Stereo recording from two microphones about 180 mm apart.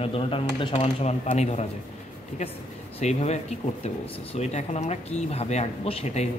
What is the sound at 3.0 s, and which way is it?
Speech, 40° left (ahead or behind).